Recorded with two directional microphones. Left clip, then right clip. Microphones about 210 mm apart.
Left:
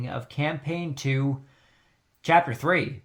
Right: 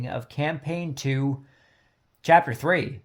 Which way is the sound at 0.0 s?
40° right (ahead or behind).